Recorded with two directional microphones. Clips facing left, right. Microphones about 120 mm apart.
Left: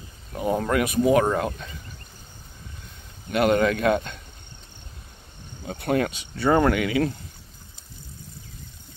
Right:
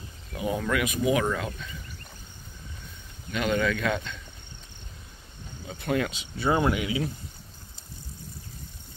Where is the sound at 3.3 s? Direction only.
50° left (ahead or behind).